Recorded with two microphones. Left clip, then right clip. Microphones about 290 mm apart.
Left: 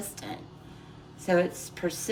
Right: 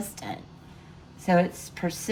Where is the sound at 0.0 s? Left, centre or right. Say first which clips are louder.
Right 3 dB; centre.